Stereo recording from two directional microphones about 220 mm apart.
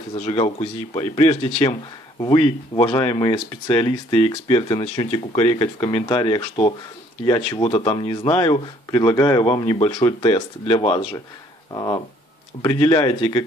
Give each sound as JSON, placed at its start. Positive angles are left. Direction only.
{"t": 0.1, "sound": "speech", "side_deg": 25}